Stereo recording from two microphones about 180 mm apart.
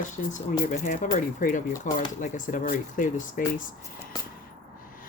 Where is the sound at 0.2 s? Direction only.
45° left (ahead or behind).